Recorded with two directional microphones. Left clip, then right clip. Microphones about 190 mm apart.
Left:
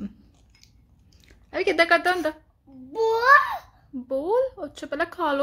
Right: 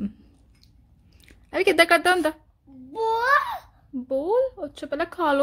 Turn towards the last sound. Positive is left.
turn(degrees=-25)  # may be behind; listen again after turning